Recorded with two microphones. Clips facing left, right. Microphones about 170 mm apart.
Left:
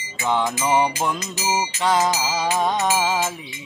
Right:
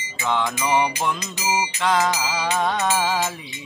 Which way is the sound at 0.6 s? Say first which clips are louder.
Left 1 dB; 25° left (ahead or behind).